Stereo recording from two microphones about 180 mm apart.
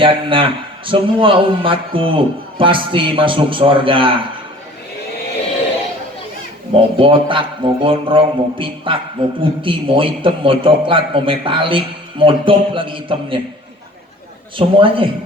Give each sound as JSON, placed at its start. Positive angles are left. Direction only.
{"t": 0.0, "sound": "a man's voice", "side_deg": -30}
{"t": 6.7, "sound": "a man's voice", "side_deg": -30}
{"t": 14.5, "sound": "a man's voice", "side_deg": -30}